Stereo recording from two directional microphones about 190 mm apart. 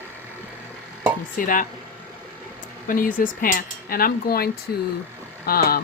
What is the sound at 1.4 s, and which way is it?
Speech, 45° left (ahead or behind).